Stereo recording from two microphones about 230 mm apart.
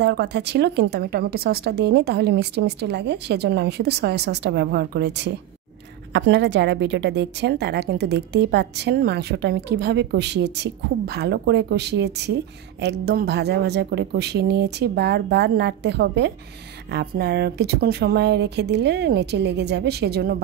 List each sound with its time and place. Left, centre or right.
0.0 s a woman's voice: right